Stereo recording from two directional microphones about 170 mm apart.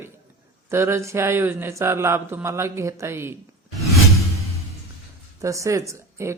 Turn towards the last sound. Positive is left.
turn(degrees=-15)  # may be behind; listen again after turning